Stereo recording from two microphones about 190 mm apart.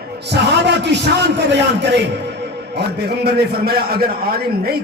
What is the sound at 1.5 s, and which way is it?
A man's voice, 65° right (ahead or behind).